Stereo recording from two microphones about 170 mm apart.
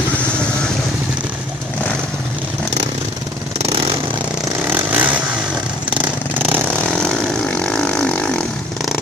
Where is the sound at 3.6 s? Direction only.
30° right (ahead or behind).